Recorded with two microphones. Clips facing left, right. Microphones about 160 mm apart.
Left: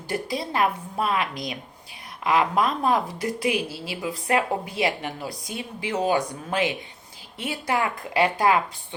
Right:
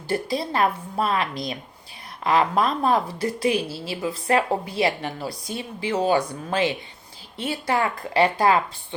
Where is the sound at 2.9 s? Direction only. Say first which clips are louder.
Right 1 dB; 15° left (ahead or behind).